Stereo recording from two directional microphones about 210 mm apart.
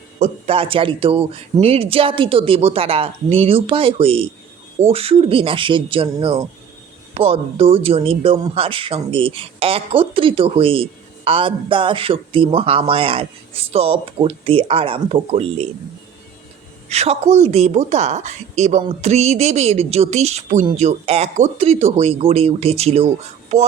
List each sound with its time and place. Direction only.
0.2 s speech: 30° right (ahead or behind)
16.9 s a woman's voice: 30° right (ahead or behind)